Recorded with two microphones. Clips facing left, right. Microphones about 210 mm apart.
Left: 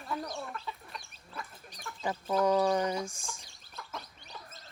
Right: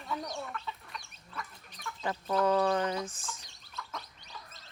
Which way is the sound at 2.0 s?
5° left (ahead or behind).